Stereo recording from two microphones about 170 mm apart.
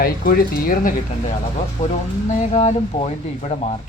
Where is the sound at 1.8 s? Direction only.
45° left (ahead or behind).